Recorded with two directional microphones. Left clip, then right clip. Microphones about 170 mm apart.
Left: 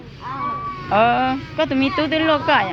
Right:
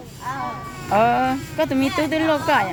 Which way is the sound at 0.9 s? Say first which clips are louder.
Left 1 dB; 20° right (ahead or behind).